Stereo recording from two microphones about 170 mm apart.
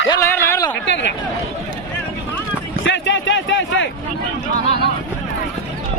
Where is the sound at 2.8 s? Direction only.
90° left.